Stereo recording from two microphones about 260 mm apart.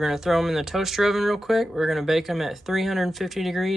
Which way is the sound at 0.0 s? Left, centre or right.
Centre.